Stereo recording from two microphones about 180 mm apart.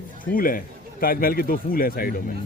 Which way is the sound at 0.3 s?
50° left (ahead or behind).